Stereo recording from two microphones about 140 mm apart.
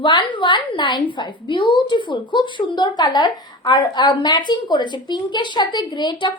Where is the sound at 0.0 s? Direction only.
35° left (ahead or behind).